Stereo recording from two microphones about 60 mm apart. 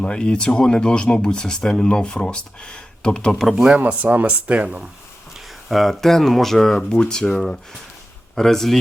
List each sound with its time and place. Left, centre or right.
0.0 s speech: centre
3.8 s speech: right
5.6 s speech: centre